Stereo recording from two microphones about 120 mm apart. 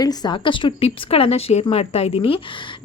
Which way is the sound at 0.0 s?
35° left (ahead or behind).